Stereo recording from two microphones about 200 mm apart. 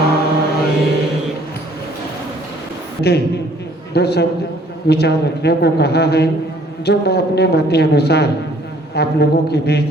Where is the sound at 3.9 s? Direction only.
55° left (ahead or behind).